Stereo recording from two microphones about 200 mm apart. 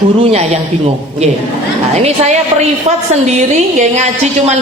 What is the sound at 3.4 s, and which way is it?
A man's voice, 35° right (ahead or behind).